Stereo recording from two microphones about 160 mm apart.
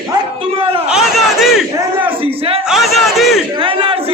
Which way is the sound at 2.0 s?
35° right (ahead or behind).